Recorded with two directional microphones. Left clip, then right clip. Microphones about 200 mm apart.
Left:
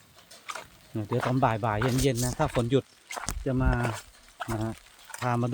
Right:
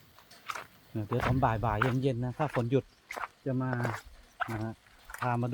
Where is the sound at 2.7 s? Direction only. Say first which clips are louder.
Left 4 dB; 20° left (ahead or behind).